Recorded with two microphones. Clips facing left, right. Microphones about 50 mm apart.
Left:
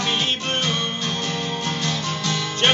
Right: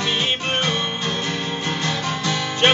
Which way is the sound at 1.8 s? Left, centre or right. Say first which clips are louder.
Right 2 dB; centre.